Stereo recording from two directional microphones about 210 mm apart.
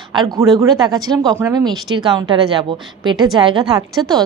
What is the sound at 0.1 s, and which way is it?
A woman's voice, 20° right (ahead or behind).